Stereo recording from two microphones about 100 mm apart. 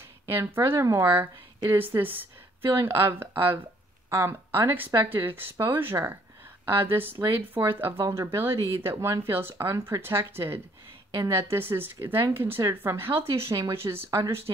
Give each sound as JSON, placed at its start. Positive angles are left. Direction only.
{"t": 0.3, "sound": "speech", "side_deg": -25}